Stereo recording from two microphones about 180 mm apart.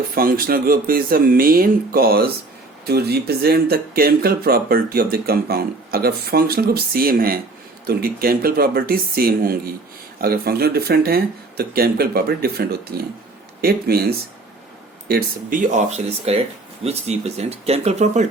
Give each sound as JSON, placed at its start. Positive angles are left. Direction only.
{"t": 0.1, "sound": "speech", "side_deg": -55}